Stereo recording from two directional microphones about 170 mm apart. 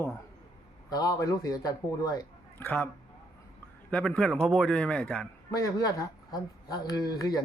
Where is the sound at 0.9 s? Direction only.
20° left (ahead or behind).